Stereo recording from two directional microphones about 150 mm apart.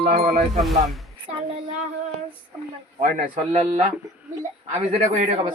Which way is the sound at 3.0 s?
70° right (ahead or behind).